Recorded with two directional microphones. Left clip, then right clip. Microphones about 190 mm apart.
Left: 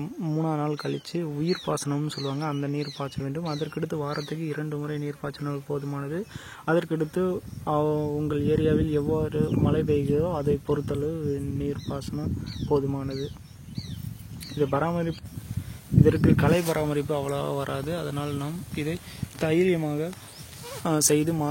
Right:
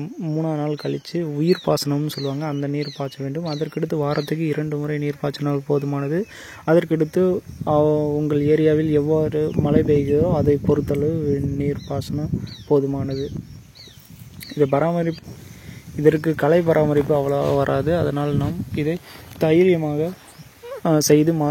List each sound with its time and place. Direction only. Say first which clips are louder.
0.0 s speech: right 4 dB; 10° right (ahead or behind)
1.4 s speech: right 10 dB; 30° right (ahead or behind)
14.6 s speech: right 7 dB; 30° right (ahead or behind)
20.8 s speech: right 8 dB; 30° right (ahead or behind)